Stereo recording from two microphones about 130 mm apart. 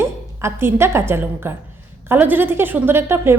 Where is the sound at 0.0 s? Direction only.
20° right (ahead or behind).